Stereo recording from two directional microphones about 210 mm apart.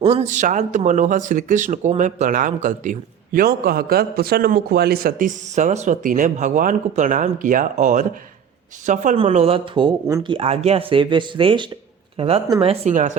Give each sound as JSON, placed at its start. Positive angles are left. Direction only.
{"t": 0.0, "sound": "speech", "side_deg": -30}
{"t": 10.1, "sound": "speech", "side_deg": -15}
{"t": 10.3, "sound": "speech", "side_deg": -30}
{"t": 12.8, "sound": "speech", "side_deg": -35}